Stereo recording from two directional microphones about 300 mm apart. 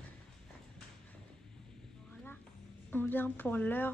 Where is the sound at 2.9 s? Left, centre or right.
Centre.